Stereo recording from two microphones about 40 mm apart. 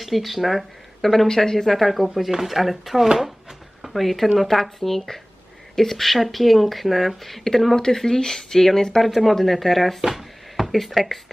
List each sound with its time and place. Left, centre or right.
0.0 s speech: centre
9.0 s speech: centre